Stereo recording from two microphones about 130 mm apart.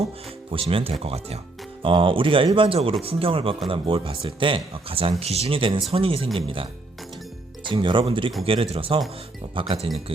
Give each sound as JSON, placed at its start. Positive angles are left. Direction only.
{"t": 0.5, "sound": "speech", "side_deg": -45}
{"t": 1.8, "sound": "speech", "side_deg": -40}
{"t": 7.7, "sound": "speech", "side_deg": -40}